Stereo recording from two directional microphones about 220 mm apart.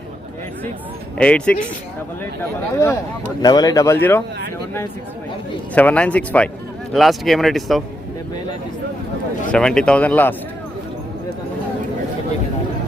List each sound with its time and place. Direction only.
1.2 s speech: 5° left (ahead or behind)
5.7 s speech: 5° left (ahead or behind)
9.5 s speech: 5° left (ahead or behind)